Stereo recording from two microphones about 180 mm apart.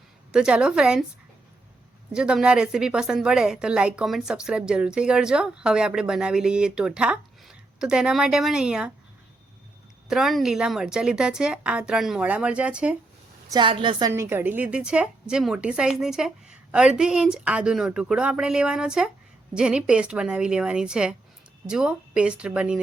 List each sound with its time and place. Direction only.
0.3 s a woman's voice: 5° right (ahead or behind)
2.1 s a woman's voice: 5° right (ahead or behind)
10.1 s a woman's voice: centre (ahead or behind)
13.5 s a woman's voice: 25° right (ahead or behind)
14.1 s a woman's voice: 15° right (ahead or behind)